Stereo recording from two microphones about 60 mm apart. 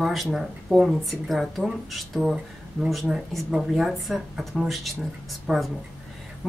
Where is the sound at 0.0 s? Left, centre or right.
Centre.